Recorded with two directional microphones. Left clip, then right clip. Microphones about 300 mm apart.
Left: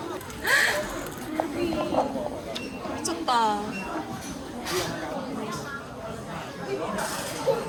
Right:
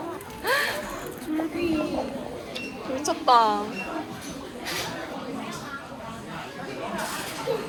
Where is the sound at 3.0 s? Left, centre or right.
Centre.